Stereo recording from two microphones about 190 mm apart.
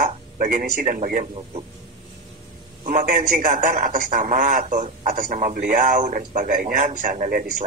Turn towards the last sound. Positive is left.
turn(degrees=-45)  # may be behind; listen again after turning